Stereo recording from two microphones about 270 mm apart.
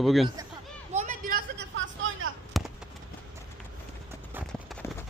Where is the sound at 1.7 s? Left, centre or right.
Right.